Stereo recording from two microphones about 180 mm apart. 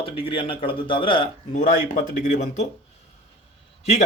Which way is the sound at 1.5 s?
45° left (ahead or behind).